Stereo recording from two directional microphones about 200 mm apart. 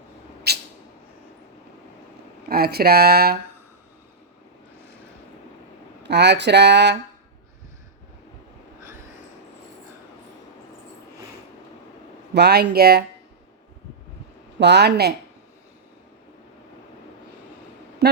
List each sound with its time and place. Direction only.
0.5 s a sound: 55° right (ahead or behind)
2.5 s speech: 50° right (ahead or behind)
6.0 s speech: 60° right (ahead or behind)
12.3 s speech: 55° right (ahead or behind)
14.6 s speech: 55° right (ahead or behind)
18.0 s a sound: 55° right (ahead or behind)